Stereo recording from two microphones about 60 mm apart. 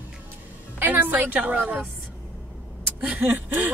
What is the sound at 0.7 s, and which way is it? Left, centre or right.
Speech, right.